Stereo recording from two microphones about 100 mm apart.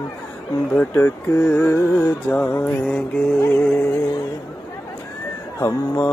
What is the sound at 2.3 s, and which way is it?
Music, 15° left (ahead or behind).